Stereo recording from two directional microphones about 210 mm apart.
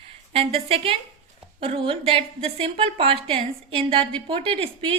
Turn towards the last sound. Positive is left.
turn(degrees=-25)  # may be behind; listen again after turning